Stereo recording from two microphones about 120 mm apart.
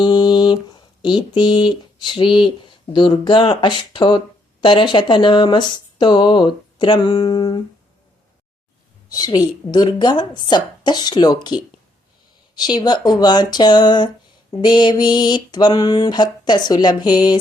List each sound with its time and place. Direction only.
0.0 s a sound: 40° left (ahead or behind)
4.6 s speech: 40° left (ahead or behind)
9.0 s speech: 35° left (ahead or behind)